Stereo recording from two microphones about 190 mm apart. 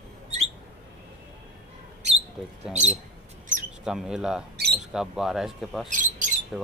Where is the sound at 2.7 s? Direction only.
35° right (ahead or behind).